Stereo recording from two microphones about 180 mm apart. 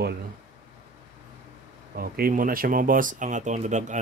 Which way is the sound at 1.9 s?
55° right (ahead or behind).